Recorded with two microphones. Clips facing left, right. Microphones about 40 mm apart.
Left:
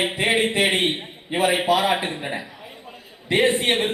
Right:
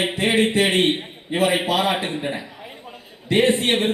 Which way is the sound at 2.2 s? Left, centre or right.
Centre.